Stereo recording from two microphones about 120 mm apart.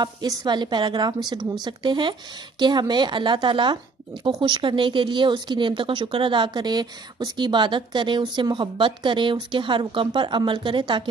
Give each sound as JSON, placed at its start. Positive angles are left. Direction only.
{"t": 0.0, "sound": "speech", "side_deg": -35}